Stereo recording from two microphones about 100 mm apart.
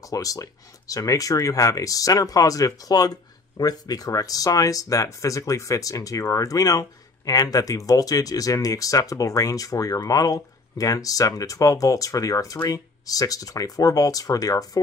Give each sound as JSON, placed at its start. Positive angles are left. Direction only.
{"t": 0.0, "sound": "speech", "side_deg": 35}